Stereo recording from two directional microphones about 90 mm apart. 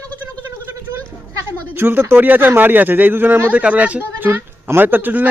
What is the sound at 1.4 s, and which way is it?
Speech, 25° right (ahead or behind).